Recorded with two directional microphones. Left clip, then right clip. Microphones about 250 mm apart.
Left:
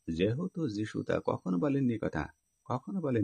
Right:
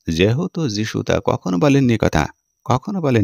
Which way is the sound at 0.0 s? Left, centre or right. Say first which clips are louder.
Right 14 dB; right.